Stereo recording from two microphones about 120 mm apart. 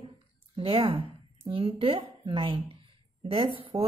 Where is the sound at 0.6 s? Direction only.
50° right (ahead or behind).